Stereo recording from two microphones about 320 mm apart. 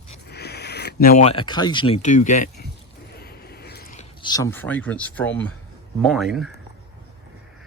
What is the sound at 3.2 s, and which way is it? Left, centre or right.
Mechanisms, left.